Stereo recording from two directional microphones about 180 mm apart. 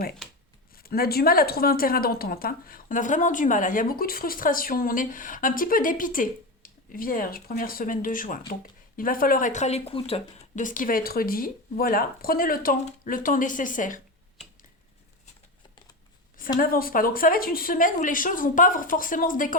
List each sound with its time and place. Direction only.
0.8 s a woman's voice: 55° left (ahead or behind)
16.6 s a woman's voice: 50° left (ahead or behind)